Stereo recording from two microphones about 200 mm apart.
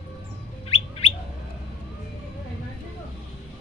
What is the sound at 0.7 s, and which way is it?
Bird, 30° left (ahead or behind).